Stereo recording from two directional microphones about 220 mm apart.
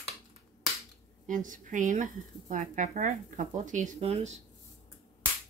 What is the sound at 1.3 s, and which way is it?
Speech, 35° right (ahead or behind).